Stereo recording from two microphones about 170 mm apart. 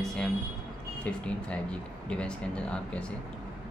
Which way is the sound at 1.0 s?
5° left (ahead or behind).